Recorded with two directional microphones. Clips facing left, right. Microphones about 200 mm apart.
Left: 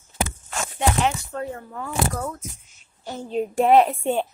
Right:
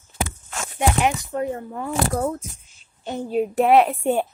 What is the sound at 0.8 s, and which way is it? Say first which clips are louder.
A woman's voice: right 2 dB; 15° right (ahead or behind).